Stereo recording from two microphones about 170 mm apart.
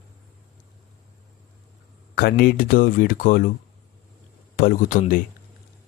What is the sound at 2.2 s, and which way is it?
Speech, 65° left (ahead or behind).